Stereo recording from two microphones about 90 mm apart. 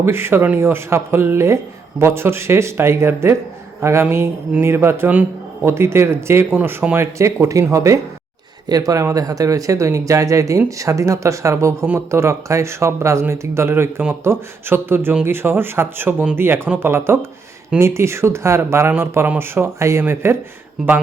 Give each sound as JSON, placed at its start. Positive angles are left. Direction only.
{"t": 0.0, "sound": "speech", "side_deg": -25}
{"t": 20.8, "sound": "speech", "side_deg": -5}